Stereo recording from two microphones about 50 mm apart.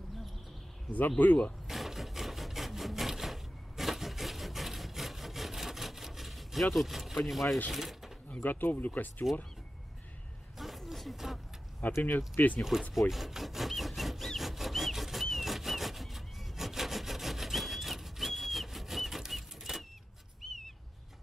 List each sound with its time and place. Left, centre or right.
0.9 s speech: left
1.7 s wood: centre
7.7 s speech: centre
8.4 s speech: left
10.6 s a sound: centre
11.8 s speech: left
13.1 s rub: centre
14.5 s a sound: centre
20.4 s bird: centre